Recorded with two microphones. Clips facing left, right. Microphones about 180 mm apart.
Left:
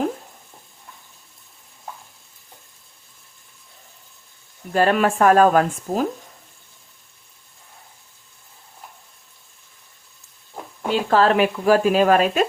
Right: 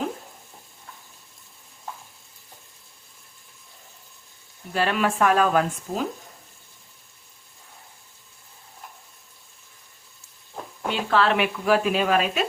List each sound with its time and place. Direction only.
4.7 s speech: 45° left (ahead or behind)
10.8 s speech: 40° left (ahead or behind)